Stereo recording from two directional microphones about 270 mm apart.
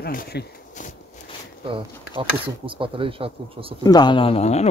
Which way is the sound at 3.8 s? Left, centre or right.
Centre.